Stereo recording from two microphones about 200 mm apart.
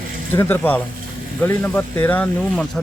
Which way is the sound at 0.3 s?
10° left (ahead or behind).